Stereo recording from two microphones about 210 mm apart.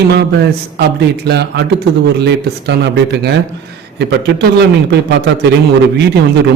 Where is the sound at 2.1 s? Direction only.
55° right (ahead or behind).